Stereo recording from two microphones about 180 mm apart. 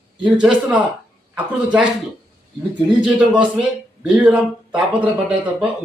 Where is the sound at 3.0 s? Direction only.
5° right (ahead or behind).